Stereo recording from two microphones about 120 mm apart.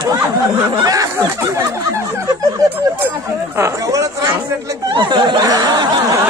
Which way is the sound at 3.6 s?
25° right (ahead or behind).